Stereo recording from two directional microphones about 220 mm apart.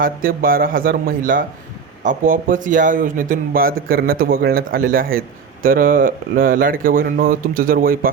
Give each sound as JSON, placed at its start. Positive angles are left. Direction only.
{"t": 0.0, "sound": "speech", "side_deg": -40}